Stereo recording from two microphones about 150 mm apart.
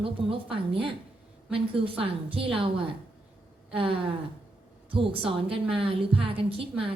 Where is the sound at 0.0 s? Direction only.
35° right (ahead or behind).